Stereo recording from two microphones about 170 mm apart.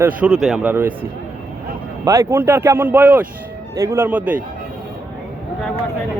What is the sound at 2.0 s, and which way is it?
Speech, 20° right (ahead or behind).